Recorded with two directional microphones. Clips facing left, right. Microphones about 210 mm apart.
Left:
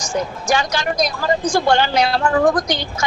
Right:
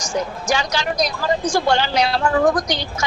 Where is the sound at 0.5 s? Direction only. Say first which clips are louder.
Left 2 dB; 50° left (ahead or behind).